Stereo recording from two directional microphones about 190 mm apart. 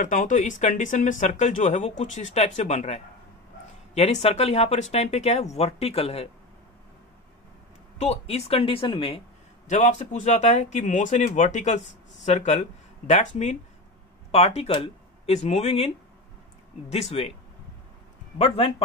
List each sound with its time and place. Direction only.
0.0 s speech: 45° left (ahead or behind)
8.0 s speech: 35° left (ahead or behind)
9.7 s speech: 40° left (ahead or behind)
16.9 s speech: 35° left (ahead or behind)